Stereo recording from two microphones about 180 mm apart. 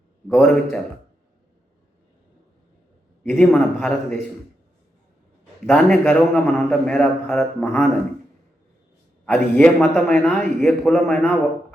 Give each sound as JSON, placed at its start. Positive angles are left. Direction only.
{"t": 0.3, "sound": "a man's voice", "side_deg": 5}
{"t": 3.2, "sound": "a man's voice", "side_deg": 10}
{"t": 5.6, "sound": "a man's voice", "side_deg": 10}
{"t": 9.2, "sound": "a man's voice", "side_deg": 10}